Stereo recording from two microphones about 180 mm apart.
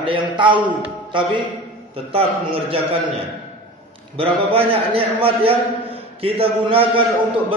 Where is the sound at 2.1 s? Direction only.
30° right (ahead or behind).